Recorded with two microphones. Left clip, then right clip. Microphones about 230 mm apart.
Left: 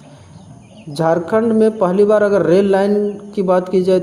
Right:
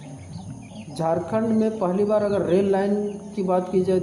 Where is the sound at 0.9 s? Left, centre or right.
Left.